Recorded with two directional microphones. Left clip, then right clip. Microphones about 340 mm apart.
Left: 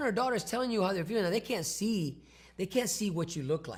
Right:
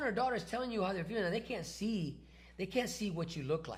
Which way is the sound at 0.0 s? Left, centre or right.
Left.